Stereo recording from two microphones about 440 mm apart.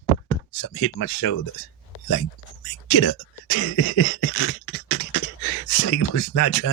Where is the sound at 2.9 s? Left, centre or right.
Left.